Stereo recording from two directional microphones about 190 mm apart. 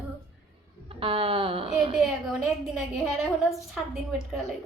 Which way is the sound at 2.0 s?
Centre (ahead or behind).